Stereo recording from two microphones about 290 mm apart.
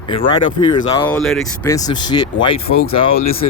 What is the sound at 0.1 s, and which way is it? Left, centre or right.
Speech, centre.